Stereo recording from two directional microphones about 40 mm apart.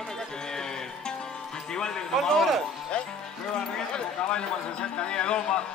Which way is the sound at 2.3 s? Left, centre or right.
Centre.